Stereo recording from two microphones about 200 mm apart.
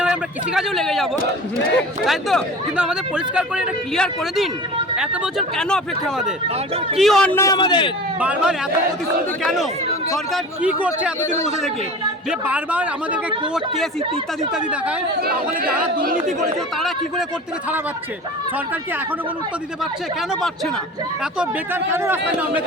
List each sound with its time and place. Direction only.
0.0 s a man's voice: 5° right (ahead or behind)
2.0 s a man's voice: centre (ahead or behind); by 7.9 s 25° left (ahead or behind)
8.2 s a man's voice: 5° right (ahead or behind)
12.3 s speech: 5° right (ahead or behind)
14.5 s speech: 5° right (ahead or behind)
15.2 s speech: 50° right (ahead or behind)
21.3 s speech: 10° right (ahead or behind)